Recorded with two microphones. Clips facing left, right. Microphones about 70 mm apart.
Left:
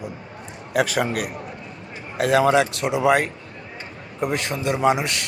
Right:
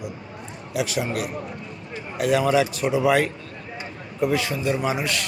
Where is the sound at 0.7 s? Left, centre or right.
Left.